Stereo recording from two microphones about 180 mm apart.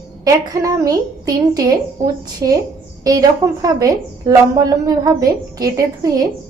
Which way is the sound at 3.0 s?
20° right (ahead or behind).